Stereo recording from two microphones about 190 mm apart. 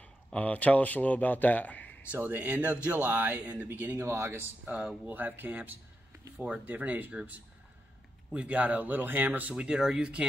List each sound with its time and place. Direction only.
0.0 s speech: 5° left (ahead or behind)
2.0 s speech: 10° right (ahead or behind)